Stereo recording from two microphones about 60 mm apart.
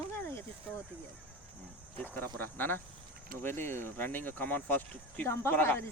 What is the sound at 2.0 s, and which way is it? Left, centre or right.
Speech, left.